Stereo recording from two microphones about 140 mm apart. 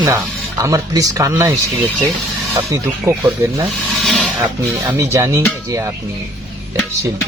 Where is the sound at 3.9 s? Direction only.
Centre (ahead or behind).